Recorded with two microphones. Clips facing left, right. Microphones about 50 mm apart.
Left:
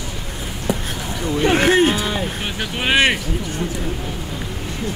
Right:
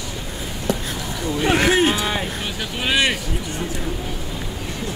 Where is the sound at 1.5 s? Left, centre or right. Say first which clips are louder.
Left 1 dB; left.